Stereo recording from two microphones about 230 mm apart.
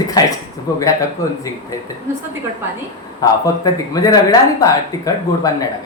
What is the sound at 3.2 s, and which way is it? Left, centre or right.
Speech, centre.